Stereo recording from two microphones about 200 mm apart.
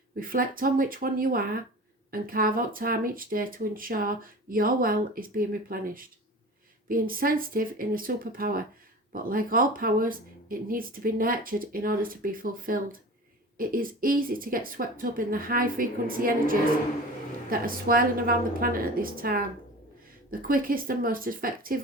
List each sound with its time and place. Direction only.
0.2 s speech: 45° right (ahead or behind)